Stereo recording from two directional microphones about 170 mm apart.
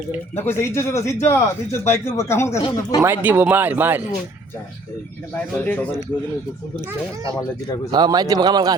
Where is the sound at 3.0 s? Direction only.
10° right (ahead or behind).